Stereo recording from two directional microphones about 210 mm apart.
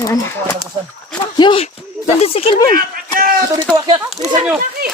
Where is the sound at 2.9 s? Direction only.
40° right (ahead or behind).